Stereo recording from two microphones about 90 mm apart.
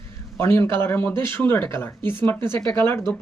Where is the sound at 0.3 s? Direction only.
25° left (ahead or behind).